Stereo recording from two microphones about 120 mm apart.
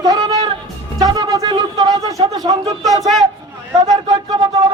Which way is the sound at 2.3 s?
30° right (ahead or behind).